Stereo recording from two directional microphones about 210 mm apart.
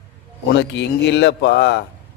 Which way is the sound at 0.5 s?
55° left (ahead or behind).